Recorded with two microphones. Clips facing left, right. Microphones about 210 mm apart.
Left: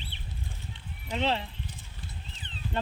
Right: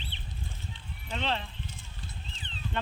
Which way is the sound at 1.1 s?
15° left (ahead or behind).